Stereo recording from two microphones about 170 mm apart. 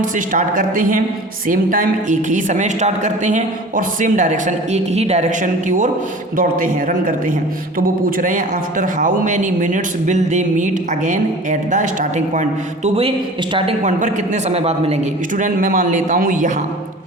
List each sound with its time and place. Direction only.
0.0 s a woman's voice: 50° right (ahead or behind)
15.4 s a woman's voice: 50° right (ahead or behind)